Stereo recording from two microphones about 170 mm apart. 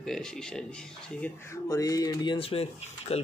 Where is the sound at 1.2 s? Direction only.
15° left (ahead or behind); by 3.1 s 35° left (ahead or behind).